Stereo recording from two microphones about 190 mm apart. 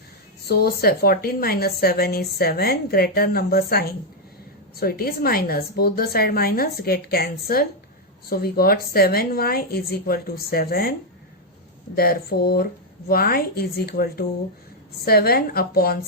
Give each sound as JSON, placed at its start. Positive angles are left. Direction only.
{"t": 0.4, "sound": "a woman's voice", "side_deg": 55}
{"t": 11.9, "sound": "a woman's voice", "side_deg": 55}